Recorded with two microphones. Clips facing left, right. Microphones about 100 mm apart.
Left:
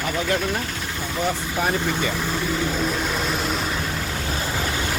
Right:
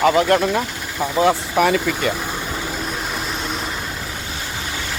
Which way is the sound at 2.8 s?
Centre (ahead or behind).